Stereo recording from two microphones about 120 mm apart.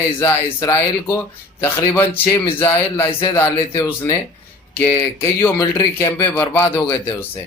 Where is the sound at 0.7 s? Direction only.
20° left (ahead or behind).